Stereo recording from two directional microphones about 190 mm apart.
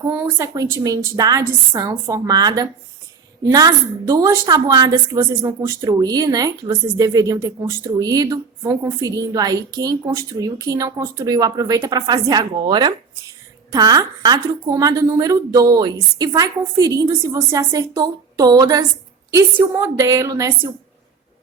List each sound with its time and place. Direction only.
0.1 s a woman's voice: 15° right (ahead or behind)